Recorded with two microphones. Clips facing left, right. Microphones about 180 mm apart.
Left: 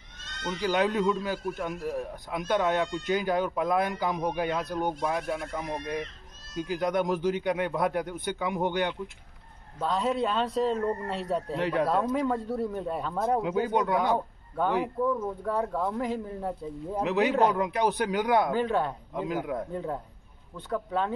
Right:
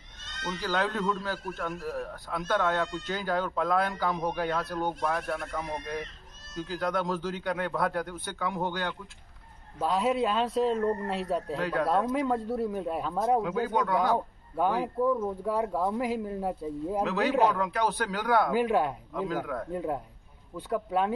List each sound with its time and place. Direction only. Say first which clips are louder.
0.5 s speech: left 4 dB; 15° left (ahead or behind)
5.2 s speech: left 1 dB; centre (ahead or behind)
5.5 s speech: left 2 dB; 15° left (ahead or behind)
9.8 s speech: right 1 dB; 5° right (ahead or behind)
11.5 s speech: left 4 dB; 25° left (ahead or behind)
11.9 s speech: even; centre (ahead or behind)
13.4 s speech: left 2 dB; 20° left (ahead or behind)
15.0 s speech: right 1 dB; 10° right (ahead or behind)
17.0 s speech: left 2 dB; 20° left (ahead or behind)
18.5 s speech: right 1 dB; 10° right (ahead or behind)
19.1 s speech: left 2 dB; 20° left (ahead or behind)
19.7 s speech: right 1 dB; 10° right (ahead or behind)